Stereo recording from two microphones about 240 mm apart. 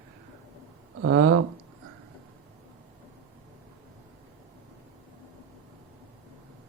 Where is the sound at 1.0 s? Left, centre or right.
Right.